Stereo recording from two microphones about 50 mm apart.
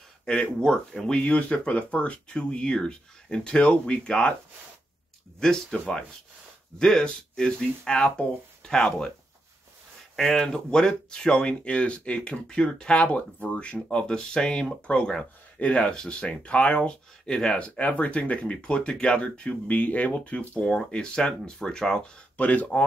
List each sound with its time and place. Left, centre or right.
0.3 s speech: centre
5.4 s speech: centre
10.1 s speech: centre; by 13.7 s left
13.8 s speech: centre
22.4 s speech: left